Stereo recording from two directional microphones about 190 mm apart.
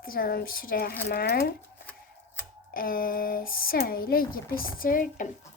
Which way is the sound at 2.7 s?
50° left (ahead or behind).